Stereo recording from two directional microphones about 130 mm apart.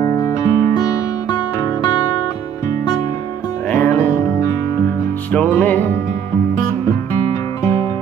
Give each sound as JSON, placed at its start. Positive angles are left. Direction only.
{"t": 0.0, "sound": "guitar", "side_deg": 30}
{"t": 3.7, "sound": "music", "side_deg": 10}
{"t": 7.6, "sound": "music", "side_deg": 20}